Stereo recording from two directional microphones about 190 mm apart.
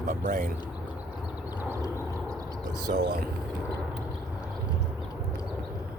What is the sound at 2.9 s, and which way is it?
Speech, 55° right (ahead or behind).